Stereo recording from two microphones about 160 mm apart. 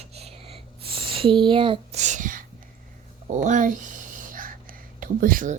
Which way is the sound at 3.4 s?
50° right (ahead or behind).